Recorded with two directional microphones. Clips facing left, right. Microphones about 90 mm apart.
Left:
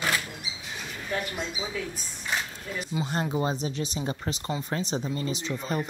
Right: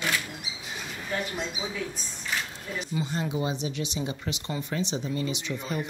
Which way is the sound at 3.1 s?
50° left (ahead or behind).